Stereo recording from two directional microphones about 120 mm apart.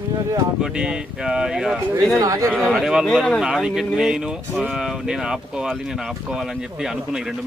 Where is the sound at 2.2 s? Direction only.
30° right (ahead or behind).